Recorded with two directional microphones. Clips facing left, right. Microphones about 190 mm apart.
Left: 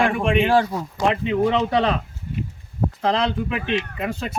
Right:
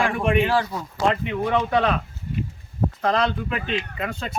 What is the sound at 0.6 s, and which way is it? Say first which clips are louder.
Speech: left 2 dB; 20° left (ahead or behind).